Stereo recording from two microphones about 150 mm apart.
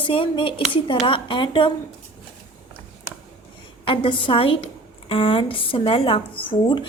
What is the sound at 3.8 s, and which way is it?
Speech, 35° left (ahead or behind).